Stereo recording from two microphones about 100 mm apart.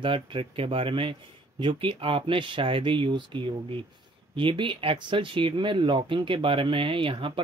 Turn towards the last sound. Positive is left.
turn(degrees=-60)  # may be behind; listen again after turning